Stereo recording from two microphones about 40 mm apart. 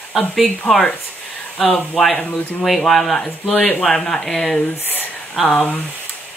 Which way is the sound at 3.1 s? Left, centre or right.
Centre.